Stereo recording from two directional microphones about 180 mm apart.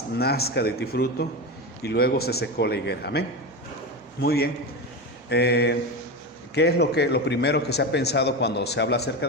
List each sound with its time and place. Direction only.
0.2 s a man's voice: 60° left (ahead or behind)